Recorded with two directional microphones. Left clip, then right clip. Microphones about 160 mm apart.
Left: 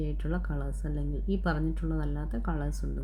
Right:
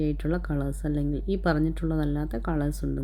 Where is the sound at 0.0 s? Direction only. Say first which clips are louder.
Right 8 dB; 35° right (ahead or behind).